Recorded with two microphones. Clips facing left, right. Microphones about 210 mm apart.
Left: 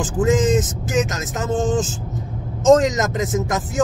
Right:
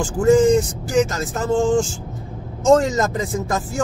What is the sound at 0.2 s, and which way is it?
Speech, 20° left (ahead or behind).